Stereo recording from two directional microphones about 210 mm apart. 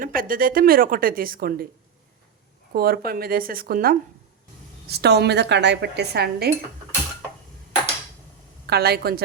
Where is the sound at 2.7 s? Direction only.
45° right (ahead or behind).